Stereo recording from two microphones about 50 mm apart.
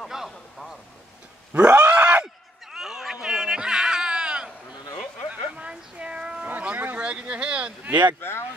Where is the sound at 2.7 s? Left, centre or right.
Centre.